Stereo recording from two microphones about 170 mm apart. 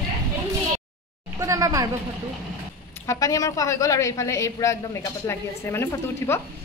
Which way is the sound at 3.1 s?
20° left (ahead or behind).